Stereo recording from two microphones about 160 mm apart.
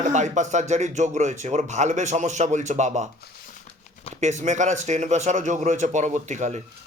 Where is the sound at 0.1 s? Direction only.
50° right (ahead or behind).